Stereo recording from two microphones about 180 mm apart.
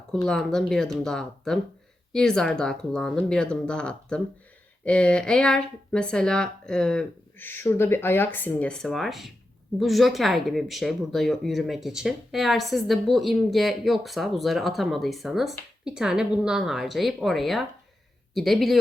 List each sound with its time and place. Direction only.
0.1 s speech: 5° left (ahead or behind)